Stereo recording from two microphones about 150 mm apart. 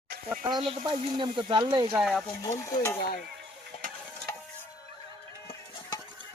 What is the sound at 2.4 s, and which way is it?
Stir, 25° left (ahead or behind).